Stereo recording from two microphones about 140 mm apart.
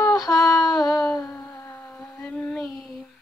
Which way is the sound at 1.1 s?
20° left (ahead or behind).